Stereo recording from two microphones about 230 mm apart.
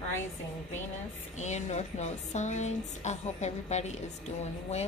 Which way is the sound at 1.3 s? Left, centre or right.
Left.